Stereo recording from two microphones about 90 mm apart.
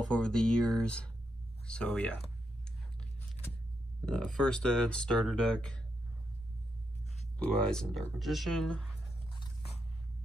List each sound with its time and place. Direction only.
0.0 s speech: 10° left (ahead or behind)
4.1 s speech: 10° left (ahead or behind)
7.3 s speech: 10° left (ahead or behind)